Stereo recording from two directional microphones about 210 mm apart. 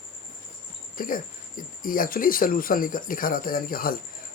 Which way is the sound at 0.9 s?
40° left (ahead or behind).